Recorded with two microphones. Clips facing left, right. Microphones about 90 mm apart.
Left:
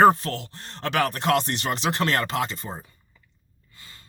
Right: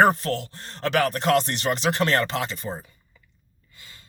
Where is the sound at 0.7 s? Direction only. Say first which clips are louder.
Right 2 dB; 25° left (ahead or behind).